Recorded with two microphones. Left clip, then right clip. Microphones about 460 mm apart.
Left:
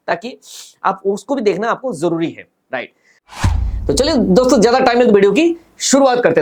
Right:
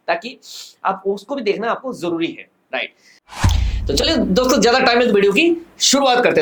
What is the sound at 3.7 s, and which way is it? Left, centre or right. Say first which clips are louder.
Speech: left 3 dB; left.